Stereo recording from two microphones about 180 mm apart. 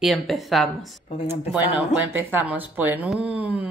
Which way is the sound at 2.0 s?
10° right (ahead or behind).